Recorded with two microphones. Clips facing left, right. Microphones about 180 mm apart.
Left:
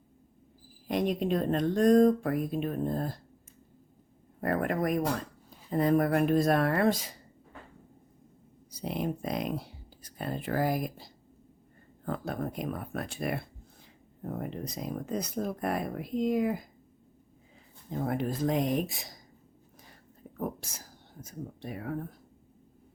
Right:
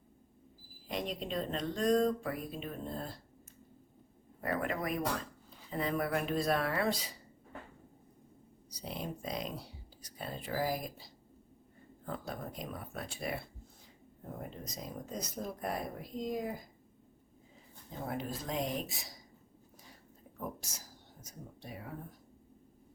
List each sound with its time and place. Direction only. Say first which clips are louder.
0.9 s speech: left 10 dB; 50° left (ahead or behind)
4.4 s speech: left 6 dB; 50° left (ahead or behind)
8.7 s speech: left 8 dB; 60° left (ahead or behind)
14.3 s speech: left 8 dB; 70° left (ahead or behind)
18.0 s speech: left 9 dB; 55° left (ahead or behind)
20.4 s speech: left 7 dB; 55° left (ahead or behind)